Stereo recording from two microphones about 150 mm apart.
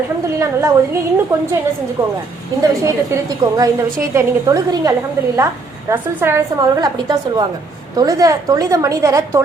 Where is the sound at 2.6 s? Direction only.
20° right (ahead or behind).